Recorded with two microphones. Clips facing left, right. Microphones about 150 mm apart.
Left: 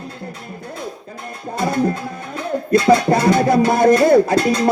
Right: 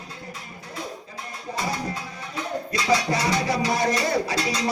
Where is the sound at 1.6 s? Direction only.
55° left (ahead or behind).